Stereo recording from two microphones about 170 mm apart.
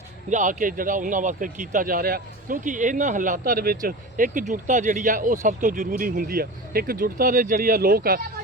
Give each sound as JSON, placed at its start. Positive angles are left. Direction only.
{"t": 0.3, "sound": "speech", "side_deg": -50}